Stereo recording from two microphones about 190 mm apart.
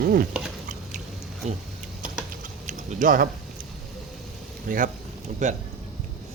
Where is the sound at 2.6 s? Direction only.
40° right (ahead or behind).